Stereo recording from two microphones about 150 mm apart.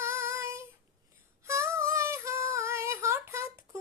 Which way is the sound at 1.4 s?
20° right (ahead or behind).